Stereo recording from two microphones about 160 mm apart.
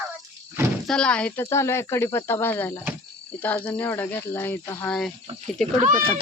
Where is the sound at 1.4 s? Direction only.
15° left (ahead or behind).